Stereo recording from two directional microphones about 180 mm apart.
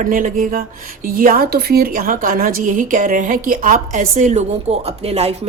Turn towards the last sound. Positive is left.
turn(degrees=-35)  # may be behind; listen again after turning